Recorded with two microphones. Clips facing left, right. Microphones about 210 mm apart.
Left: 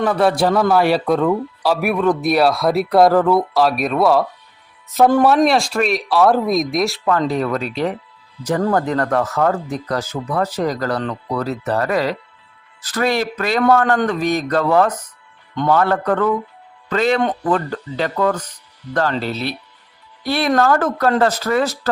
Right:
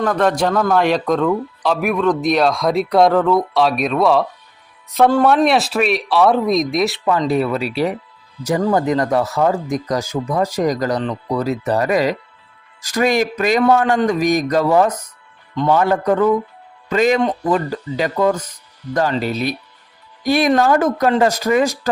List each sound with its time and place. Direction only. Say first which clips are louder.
0.0 s speech: left 1 dB; 10° left (ahead or behind)
5.5 s speech: right 1 dB; 5° right (ahead or behind)
18.9 s speech: right 1 dB; 45° right (ahead or behind)
19.2 s speech: right 3 dB; 15° right (ahead or behind)